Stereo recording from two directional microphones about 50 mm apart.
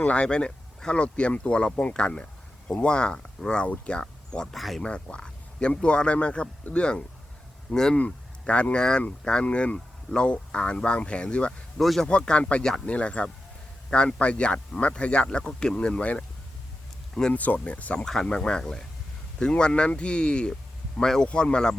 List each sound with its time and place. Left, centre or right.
0.0 s speech: left
4.5 s speech: centre
4.8 s speech: left
7.9 s speech: left
17.3 s speech: left
17.9 s speech: centre